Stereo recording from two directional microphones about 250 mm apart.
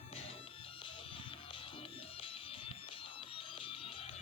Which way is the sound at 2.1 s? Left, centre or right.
Left.